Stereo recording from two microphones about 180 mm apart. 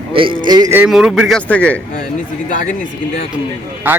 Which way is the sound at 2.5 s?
45° left (ahead or behind).